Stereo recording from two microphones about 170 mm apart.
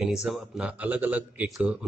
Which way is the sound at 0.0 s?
5° right (ahead or behind).